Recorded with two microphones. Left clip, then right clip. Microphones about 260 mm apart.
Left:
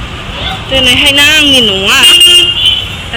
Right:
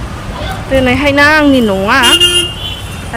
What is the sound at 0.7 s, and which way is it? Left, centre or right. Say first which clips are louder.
Speech: left 4 dB; centre.